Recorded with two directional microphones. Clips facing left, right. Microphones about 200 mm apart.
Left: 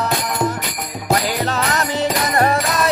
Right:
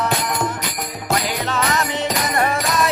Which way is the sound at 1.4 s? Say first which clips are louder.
Left 1 dB; 40° left (ahead or behind).